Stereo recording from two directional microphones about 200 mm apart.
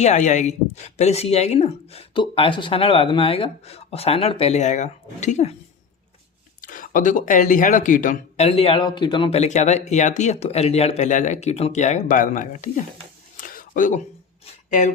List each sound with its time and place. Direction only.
0.0 s speech: 35° left (ahead or behind)
6.6 s speech: 40° left (ahead or behind)
13.3 s a sound: 40° left (ahead or behind)